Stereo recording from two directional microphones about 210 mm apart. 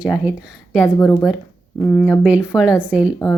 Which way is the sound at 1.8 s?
10° left (ahead or behind).